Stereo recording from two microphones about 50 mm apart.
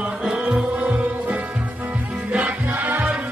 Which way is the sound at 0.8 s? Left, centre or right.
Right.